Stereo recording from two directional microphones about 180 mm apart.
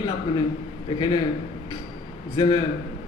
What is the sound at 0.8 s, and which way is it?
Speech, 25° left (ahead or behind).